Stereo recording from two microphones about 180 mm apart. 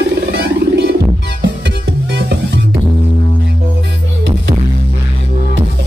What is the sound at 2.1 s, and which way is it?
Music, 70° right (ahead or behind).